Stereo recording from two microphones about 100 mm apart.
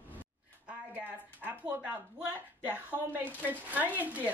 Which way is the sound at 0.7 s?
15° right (ahead or behind).